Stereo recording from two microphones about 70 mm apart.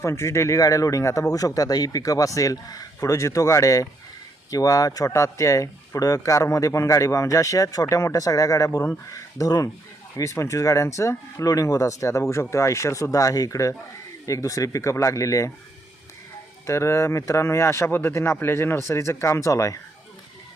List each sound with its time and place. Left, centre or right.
0.0 s speech: left
10.2 s speech: left
16.6 s speech: left